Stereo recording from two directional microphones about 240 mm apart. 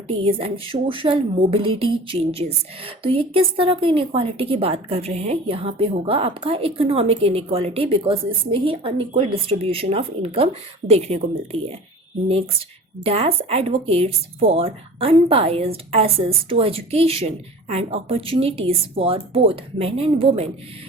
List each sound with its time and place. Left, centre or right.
0.1 s a woman's voice: right